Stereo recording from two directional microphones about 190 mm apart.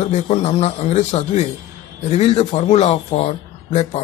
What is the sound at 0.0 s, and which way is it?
Speech, 35° left (ahead or behind).